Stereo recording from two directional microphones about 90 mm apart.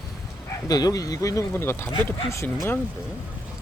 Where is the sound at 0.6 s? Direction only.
45° left (ahead or behind).